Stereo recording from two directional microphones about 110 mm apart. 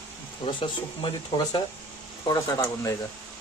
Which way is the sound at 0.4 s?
50° left (ahead or behind).